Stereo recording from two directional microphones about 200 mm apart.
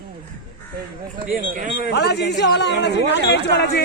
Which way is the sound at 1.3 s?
40° right (ahead or behind).